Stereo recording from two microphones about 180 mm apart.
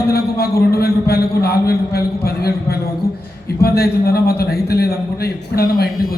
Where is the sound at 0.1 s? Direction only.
60° left (ahead or behind).